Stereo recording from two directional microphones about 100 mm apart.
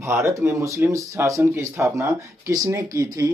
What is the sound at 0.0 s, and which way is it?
Speech, 25° right (ahead or behind).